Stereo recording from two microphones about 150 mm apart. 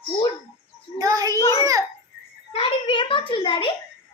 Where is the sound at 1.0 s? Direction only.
25° right (ahead or behind).